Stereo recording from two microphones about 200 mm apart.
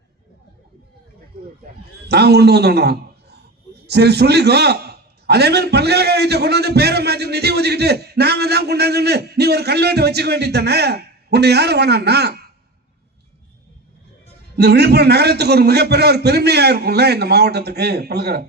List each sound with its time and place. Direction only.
2.0 s a man's voice: 55° right (ahead or behind)
14.5 s a man's voice: 55° right (ahead or behind)